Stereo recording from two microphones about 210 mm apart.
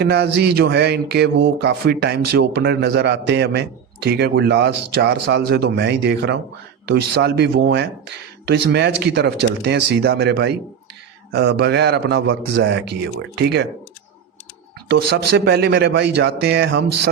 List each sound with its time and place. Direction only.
0.0 s speech: 50° right (ahead or behind)
14.8 s speech: 50° right (ahead or behind)